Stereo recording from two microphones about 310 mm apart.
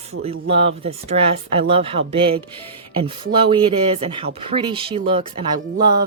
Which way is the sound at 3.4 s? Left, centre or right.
Centre.